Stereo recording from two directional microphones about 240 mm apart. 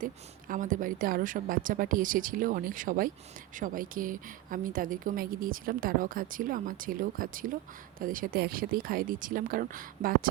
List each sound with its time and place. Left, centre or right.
0.0 s a woman's voice: right